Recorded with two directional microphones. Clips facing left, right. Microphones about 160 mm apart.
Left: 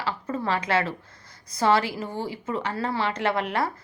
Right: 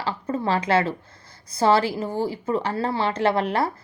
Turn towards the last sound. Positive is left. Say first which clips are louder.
# right 4 dB
turn(degrees=-30)  # may be behind; listen again after turning